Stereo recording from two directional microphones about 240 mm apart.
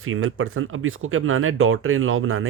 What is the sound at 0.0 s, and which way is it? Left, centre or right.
Speech, right.